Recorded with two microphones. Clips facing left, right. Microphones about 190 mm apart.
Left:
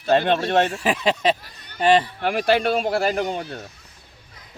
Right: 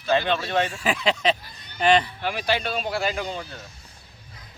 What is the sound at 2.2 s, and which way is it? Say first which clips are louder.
Speech: left 6 dB; 50° left (ahead or behind).